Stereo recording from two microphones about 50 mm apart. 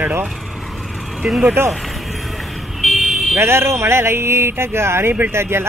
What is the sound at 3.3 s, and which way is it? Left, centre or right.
Speech, right.